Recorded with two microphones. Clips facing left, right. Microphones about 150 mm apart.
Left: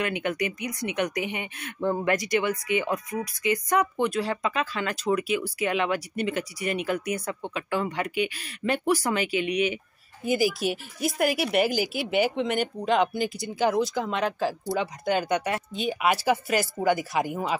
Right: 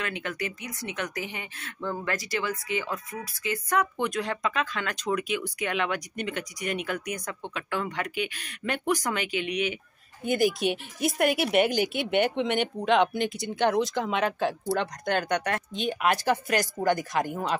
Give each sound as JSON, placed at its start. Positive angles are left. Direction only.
{"t": 0.0, "sound": "speech", "side_deg": 15}
{"t": 4.0, "sound": "speech", "side_deg": 5}